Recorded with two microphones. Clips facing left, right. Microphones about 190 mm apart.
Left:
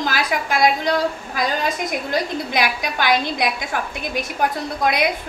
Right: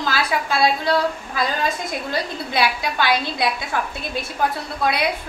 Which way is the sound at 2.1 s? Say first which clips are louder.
Left 3 dB; 15° left (ahead or behind).